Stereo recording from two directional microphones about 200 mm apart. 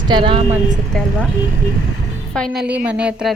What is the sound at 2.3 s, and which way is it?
A woman's voice, centre (ahead or behind).